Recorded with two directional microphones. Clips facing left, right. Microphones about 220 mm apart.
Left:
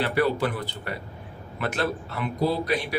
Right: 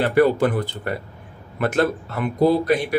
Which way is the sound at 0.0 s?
50° right (ahead or behind).